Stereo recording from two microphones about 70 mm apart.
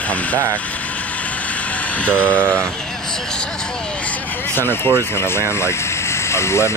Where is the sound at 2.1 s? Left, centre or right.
Right.